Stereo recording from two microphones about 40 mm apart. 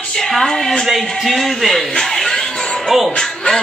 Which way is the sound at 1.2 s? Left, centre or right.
Centre.